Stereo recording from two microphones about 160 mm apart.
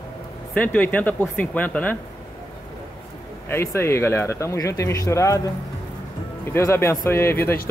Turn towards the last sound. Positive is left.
turn(degrees=15)  # may be behind; listen again after turning